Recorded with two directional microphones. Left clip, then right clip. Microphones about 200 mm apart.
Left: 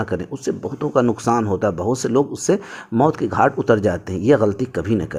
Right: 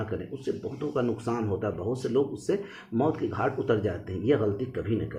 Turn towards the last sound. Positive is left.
turn(degrees=50)  # may be behind; listen again after turning